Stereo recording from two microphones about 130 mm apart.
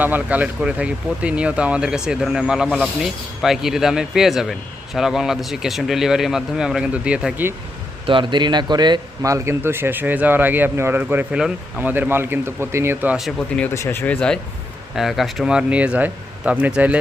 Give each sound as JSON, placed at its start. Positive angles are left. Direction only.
{"t": 0.0, "sound": "a man's voice", "side_deg": -15}
{"t": 8.0, "sound": "a man's voice", "side_deg": -40}
{"t": 13.7, "sound": "a man's voice", "side_deg": 20}